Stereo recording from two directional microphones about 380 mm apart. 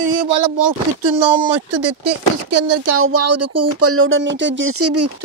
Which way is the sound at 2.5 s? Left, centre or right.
Right.